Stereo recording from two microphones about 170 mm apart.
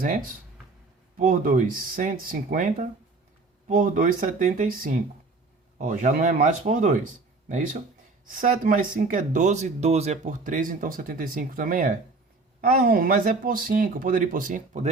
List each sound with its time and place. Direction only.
0.0 s speech: 55° right (ahead or behind)